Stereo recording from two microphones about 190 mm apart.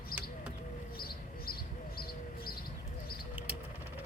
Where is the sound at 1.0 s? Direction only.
55° left (ahead or behind).